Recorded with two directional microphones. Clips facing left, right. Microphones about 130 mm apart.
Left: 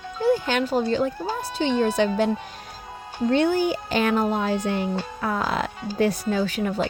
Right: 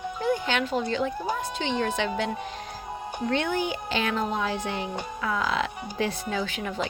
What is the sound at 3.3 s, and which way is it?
Speech, 40° left (ahead or behind).